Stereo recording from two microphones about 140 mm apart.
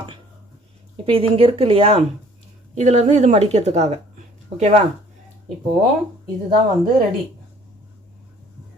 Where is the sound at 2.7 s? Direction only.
55° right (ahead or behind).